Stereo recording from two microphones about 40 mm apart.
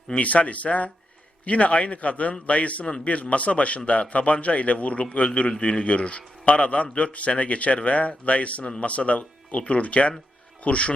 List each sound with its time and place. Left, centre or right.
0.1 s a man's voice: left